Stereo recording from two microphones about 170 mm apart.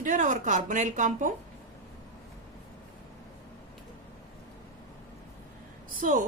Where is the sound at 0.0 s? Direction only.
45° right (ahead or behind).